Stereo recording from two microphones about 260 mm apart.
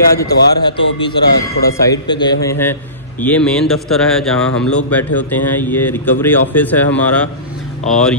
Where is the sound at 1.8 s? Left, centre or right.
Centre.